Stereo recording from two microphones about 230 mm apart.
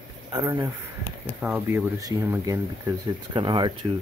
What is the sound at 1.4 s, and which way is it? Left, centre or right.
Speech, centre.